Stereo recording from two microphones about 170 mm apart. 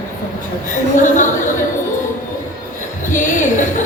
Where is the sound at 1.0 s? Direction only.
50° left (ahead or behind).